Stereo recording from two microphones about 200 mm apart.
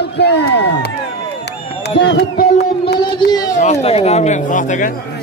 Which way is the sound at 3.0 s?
20° left (ahead or behind).